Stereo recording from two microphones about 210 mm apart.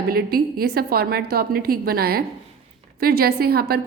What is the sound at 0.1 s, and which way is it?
A woman's voice, 45° right (ahead or behind).